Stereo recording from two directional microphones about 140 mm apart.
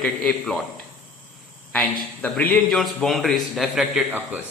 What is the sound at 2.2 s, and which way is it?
Speech, 10° left (ahead or behind).